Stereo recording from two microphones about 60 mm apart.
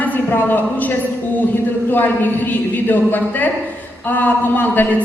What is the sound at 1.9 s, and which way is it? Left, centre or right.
Speech, left.